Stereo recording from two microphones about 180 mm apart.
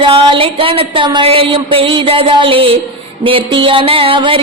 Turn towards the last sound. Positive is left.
turn(degrees=-30)  # may be behind; listen again after turning